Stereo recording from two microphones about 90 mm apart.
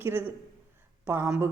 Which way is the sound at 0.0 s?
25° right (ahead or behind).